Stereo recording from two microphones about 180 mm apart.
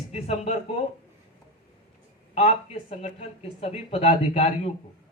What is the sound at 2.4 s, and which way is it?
Speech, 35° left (ahead or behind).